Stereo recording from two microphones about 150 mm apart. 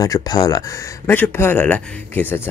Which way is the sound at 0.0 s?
25° left (ahead or behind).